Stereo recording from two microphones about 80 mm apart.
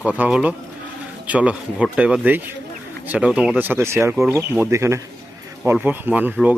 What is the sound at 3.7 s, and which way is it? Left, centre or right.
Speech, right.